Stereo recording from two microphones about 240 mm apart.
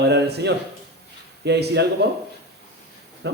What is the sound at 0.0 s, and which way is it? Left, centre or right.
Speech, right.